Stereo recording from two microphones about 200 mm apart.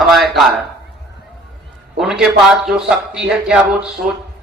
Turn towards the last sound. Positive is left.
turn(degrees=-5)  # may be behind; listen again after turning